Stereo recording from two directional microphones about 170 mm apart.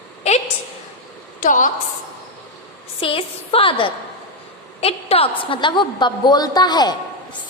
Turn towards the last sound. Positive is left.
turn(degrees=25)  # may be behind; listen again after turning